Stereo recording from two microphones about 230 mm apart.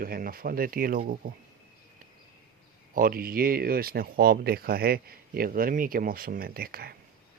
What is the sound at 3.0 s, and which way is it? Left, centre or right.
Speech, right.